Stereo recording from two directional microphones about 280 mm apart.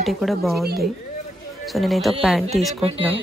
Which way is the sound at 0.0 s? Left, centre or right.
Centre.